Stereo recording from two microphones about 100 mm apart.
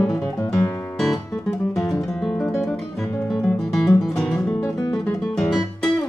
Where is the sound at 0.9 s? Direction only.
Centre (ahead or behind).